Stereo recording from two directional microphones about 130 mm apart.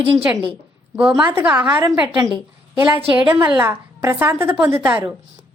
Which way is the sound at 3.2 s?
15° right (ahead or behind).